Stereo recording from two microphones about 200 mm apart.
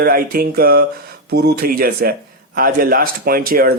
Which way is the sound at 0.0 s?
45° right (ahead or behind).